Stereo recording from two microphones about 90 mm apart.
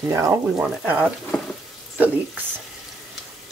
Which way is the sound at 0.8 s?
15° right (ahead or behind).